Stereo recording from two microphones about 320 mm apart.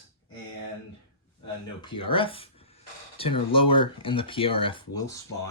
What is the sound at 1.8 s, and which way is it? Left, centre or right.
Speech, centre.